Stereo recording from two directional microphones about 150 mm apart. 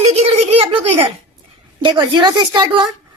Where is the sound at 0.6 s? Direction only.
35° right (ahead or behind).